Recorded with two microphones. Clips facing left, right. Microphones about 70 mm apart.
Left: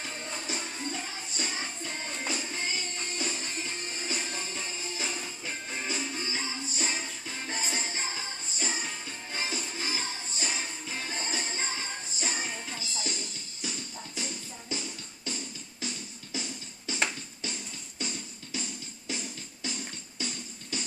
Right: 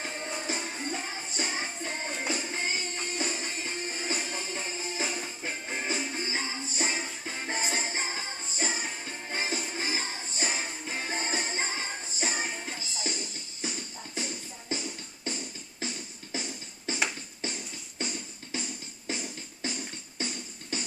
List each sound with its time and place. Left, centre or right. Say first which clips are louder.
0.5 s music: right 1 dB; right